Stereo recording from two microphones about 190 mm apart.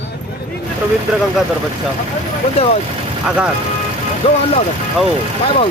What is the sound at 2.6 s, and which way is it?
Speech, 30° left (ahead or behind).